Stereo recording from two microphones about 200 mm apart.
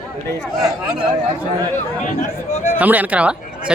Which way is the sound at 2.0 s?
35° left (ahead or behind).